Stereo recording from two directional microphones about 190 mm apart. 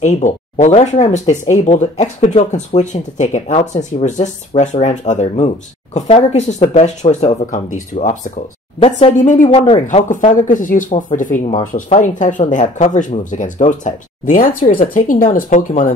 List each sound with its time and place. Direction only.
0.0 s a woman's voice: 40° left (ahead or behind)